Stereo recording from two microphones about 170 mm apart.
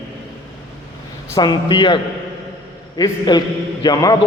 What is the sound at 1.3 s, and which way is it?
Speech, 25° left (ahead or behind).